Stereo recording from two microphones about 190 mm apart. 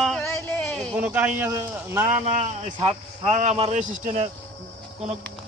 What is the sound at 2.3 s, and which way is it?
A man's voice, 40° right (ahead or behind).